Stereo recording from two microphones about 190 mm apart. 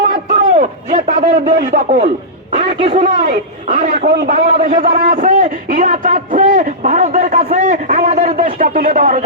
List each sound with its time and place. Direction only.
0.1 s a sound: 40° right (ahead or behind)
2.6 s a man's voice: 30° right (ahead or behind)
8.5 s a man's voice: 50° right (ahead or behind)